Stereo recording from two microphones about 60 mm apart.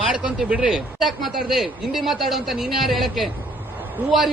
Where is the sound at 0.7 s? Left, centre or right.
Centre.